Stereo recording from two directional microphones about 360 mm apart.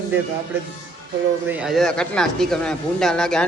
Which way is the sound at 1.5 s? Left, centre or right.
Centre.